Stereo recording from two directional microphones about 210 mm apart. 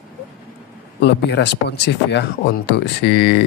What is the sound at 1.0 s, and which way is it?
Speech, 55° left (ahead or behind).